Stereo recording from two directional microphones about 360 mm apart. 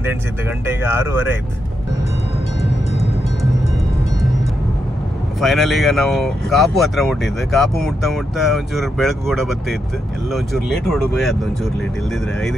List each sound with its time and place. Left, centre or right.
0.7 s speech: centre
2.6 s music: centre
5.4 s speech: centre